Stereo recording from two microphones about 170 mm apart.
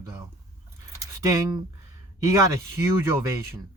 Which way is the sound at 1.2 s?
20° right (ahead or behind).